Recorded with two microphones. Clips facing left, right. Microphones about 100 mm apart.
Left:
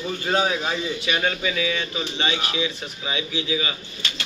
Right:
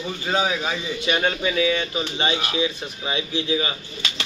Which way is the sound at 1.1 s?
35° right (ahead or behind).